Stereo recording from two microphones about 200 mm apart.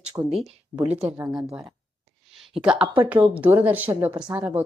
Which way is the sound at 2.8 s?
25° right (ahead or behind).